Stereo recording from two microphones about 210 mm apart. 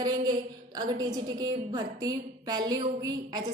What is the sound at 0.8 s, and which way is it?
A woman's voice, 20° right (ahead or behind).